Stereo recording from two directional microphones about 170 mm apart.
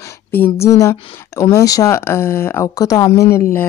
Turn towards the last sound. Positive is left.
turn(degrees=15)  # may be behind; listen again after turning